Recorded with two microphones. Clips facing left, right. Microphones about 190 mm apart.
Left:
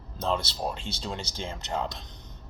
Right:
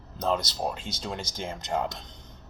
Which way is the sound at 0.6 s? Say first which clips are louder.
Right 1 dB; 5° right (ahead or behind).